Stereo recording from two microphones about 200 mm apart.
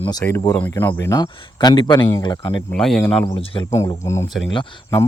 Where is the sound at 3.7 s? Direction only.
15° left (ahead or behind).